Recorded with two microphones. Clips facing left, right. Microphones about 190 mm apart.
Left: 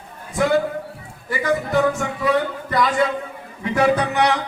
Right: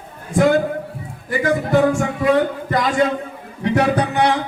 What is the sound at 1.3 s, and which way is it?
Speech, 50° right (ahead or behind).